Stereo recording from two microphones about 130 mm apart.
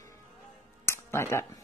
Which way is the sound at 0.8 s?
20° left (ahead or behind).